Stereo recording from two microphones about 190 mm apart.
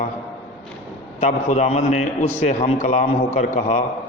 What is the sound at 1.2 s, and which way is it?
A man's voice, 40° left (ahead or behind).